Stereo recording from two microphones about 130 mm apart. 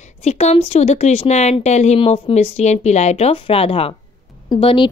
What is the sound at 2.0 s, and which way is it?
A woman's voice, 50° left (ahead or behind).